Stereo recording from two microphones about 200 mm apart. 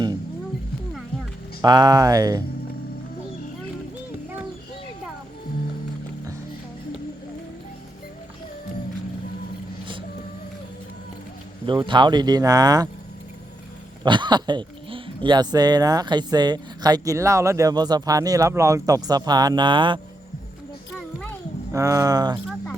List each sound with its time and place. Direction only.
1.6 s speech: 20° right (ahead or behind)
11.6 s speech: 25° right (ahead or behind)
14.0 s speech: 20° right (ahead or behind)
21.7 s speech: 15° right (ahead or behind)